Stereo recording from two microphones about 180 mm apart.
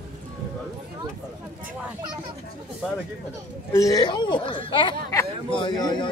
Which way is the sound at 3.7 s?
20° left (ahead or behind).